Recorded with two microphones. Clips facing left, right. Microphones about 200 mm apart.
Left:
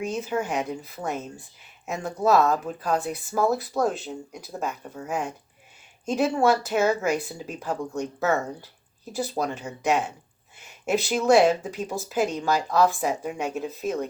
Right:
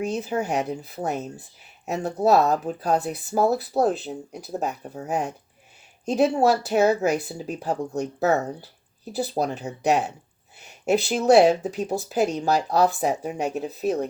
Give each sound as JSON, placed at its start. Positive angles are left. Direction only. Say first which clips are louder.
{"t": 0.0, "sound": "speech", "louder": "right 2 dB", "side_deg": -35}